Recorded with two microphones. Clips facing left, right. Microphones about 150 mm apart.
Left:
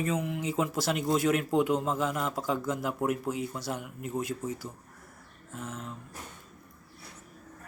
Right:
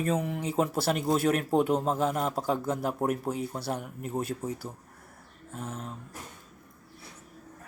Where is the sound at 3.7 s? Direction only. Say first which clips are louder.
Right 1 dB; 50° right (ahead or behind).